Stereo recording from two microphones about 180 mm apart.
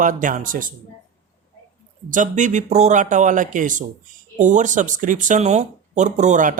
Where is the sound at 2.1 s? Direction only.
45° right (ahead or behind).